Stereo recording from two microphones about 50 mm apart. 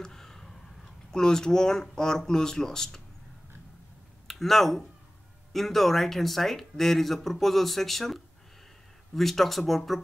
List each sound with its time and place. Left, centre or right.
0.0 s speech: centre
4.3 s speech: centre